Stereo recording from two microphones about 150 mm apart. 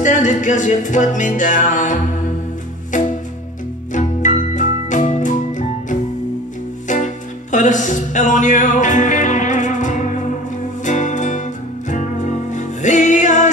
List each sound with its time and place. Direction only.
0.0 s music: 55° left (ahead or behind)
3.9 s organ: 55° left (ahead or behind)
7.5 s music: 55° left (ahead or behind)